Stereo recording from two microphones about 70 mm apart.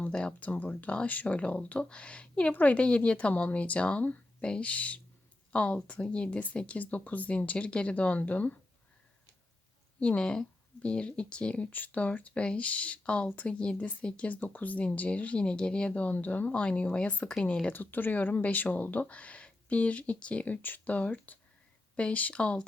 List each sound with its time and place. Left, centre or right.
0.0 s speech: centre
10.0 s speech: centre
17.7 s speech: left